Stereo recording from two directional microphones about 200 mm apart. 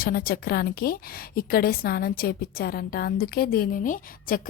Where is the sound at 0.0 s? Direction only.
45° left (ahead or behind).